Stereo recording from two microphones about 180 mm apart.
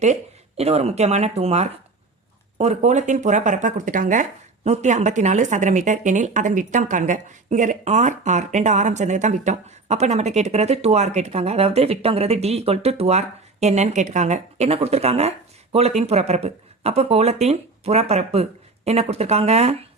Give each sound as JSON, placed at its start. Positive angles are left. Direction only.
{"t": 0.0, "sound": "speech", "side_deg": -35}